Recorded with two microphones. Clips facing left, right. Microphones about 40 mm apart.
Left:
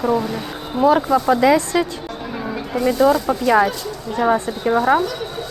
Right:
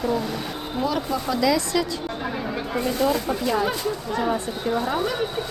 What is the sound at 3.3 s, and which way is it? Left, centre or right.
Speech, left.